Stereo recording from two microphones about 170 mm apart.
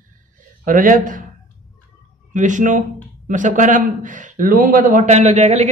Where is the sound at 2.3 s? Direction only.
45° right (ahead or behind).